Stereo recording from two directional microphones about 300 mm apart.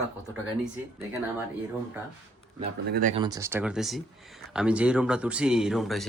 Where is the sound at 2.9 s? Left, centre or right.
Right.